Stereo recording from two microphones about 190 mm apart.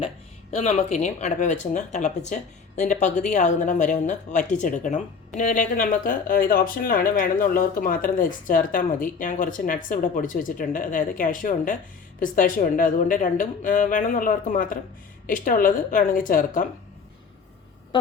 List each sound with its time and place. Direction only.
0.5 s speech: 35° left (ahead or behind)